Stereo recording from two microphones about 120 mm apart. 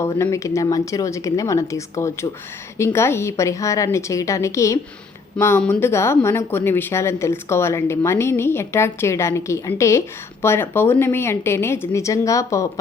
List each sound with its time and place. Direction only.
0.0 s speech: 25° left (ahead or behind)